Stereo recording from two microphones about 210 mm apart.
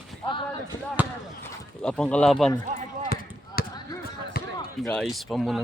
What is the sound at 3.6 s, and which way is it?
Basketball bounce, 45° left (ahead or behind).